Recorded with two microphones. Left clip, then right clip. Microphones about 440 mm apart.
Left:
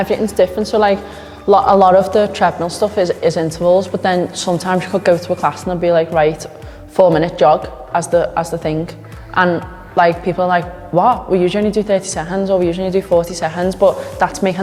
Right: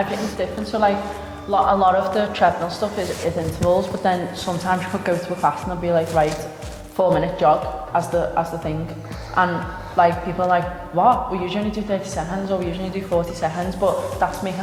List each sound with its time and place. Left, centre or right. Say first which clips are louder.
0.3 s a woman's voice: left 10 dB; left
3.7 s a man's voice: left 5 dB; left
14.2 s a woman's voice: left 7 dB; left